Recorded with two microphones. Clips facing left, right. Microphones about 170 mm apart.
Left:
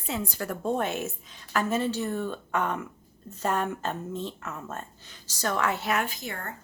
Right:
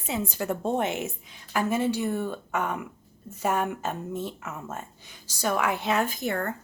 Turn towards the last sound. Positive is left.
turn(degrees=-55)  # may be behind; listen again after turning